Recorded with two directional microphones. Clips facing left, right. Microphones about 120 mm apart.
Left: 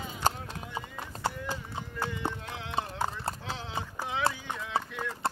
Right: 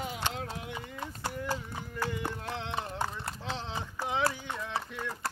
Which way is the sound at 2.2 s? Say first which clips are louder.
Left 3 dB; 25° left (ahead or behind).